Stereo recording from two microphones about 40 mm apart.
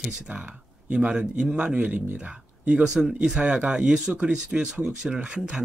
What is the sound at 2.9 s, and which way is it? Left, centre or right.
Speech, centre.